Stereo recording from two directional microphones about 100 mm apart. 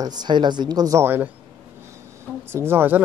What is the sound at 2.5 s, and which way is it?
Speech, 25° right (ahead or behind).